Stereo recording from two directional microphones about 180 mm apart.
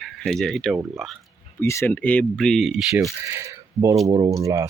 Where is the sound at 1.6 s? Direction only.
15° left (ahead or behind); by 3.1 s centre (ahead or behind).